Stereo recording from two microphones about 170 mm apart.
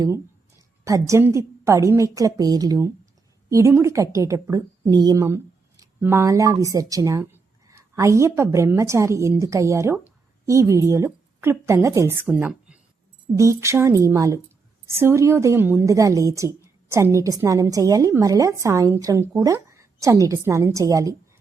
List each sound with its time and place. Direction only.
0.9 s a woman's voice: 20° right (ahead or behind)
13.3 s a woman's voice: 15° right (ahead or behind)